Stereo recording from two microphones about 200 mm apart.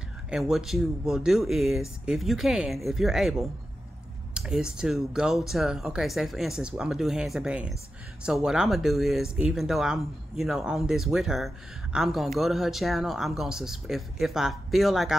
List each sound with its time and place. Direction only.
0.3 s speech: centre (ahead or behind)